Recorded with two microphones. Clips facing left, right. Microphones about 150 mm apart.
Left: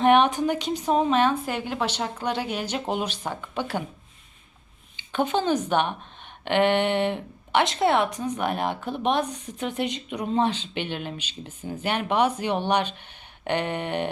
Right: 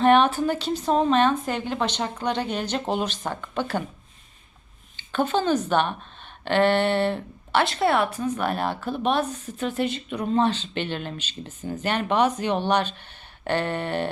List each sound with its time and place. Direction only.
0.0 s a woman's voice: 15° left (ahead or behind)
4.9 s a woman's voice: 15° left (ahead or behind)